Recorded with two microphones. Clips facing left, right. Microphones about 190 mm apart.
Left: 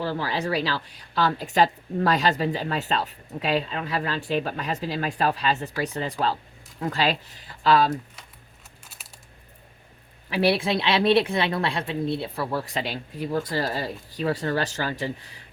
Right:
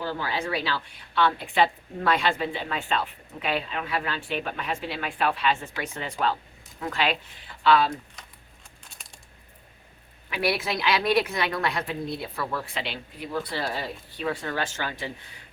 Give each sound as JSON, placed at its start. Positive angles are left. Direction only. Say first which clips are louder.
{"t": 0.0, "sound": "speech", "louder": "left 3 dB", "side_deg": 35}
{"t": 8.8, "sound": "a sound", "louder": "even", "side_deg": 5}
{"t": 10.2, "sound": "speech", "louder": "left 5 dB", "side_deg": 30}